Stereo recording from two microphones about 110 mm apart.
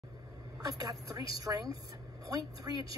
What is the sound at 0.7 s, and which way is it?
A woman's voice, 35° right (ahead or behind).